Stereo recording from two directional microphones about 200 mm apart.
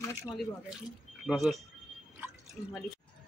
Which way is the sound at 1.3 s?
Centre (ahead or behind).